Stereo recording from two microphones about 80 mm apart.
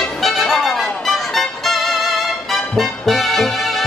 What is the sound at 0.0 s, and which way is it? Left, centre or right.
Music, centre.